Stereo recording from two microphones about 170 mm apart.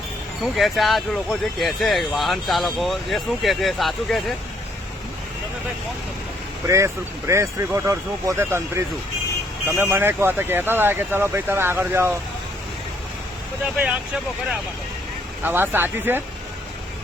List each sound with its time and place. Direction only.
0.4 s speech: centre (ahead or behind)
6.7 s speech: 15° right (ahead or behind)
15.4 s speech: 10° right (ahead or behind)